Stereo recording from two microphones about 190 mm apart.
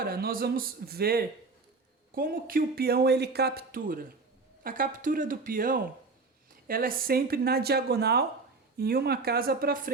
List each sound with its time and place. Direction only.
0.0 s speech: 55° right (ahead or behind)